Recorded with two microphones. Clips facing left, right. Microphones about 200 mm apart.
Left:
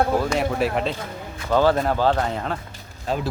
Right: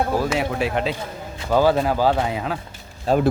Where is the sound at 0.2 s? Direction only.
5° right (ahead or behind).